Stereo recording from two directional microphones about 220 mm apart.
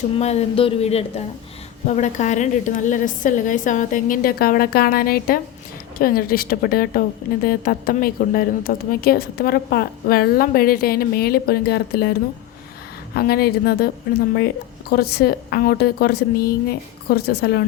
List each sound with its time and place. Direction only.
0.2 s a woman's voice: 30° left (ahead or behind); by 12.1 s 45° left (ahead or behind)
13.1 s a woman's voice: 45° left (ahead or behind)